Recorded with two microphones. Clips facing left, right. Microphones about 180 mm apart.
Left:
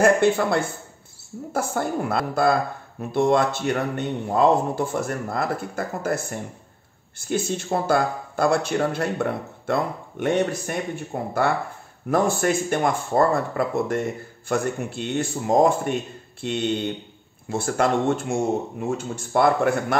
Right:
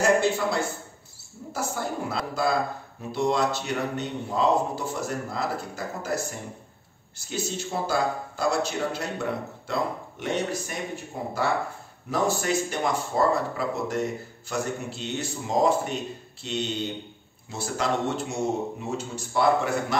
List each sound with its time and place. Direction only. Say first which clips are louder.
0.0 s a man's voice: left 4 dB; 55° left (ahead or behind)